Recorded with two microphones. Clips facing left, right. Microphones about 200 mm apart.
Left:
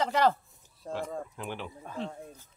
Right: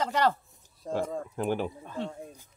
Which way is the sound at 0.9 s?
45° right (ahead or behind).